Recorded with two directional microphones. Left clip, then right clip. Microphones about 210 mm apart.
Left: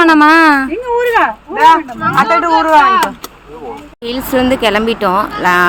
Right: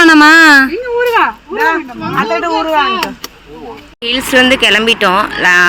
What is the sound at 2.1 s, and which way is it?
Speech, 50° left (ahead or behind).